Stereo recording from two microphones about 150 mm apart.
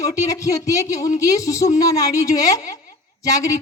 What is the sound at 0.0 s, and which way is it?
Speech, 20° left (ahead or behind).